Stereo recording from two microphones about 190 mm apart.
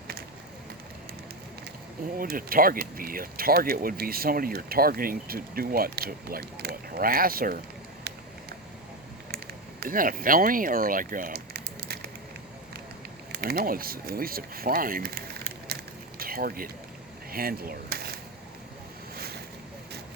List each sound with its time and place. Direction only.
2.1 s speech: 50° right (ahead or behind)
9.8 s speech: 45° right (ahead or behind)
13.3 s speech: 55° right (ahead or behind)
15.6 s a sound: 55° right (ahead or behind)
19.1 s boat: 55° right (ahead or behind)